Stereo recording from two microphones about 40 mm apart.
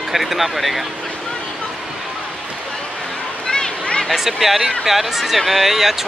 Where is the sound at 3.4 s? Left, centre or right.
Centre.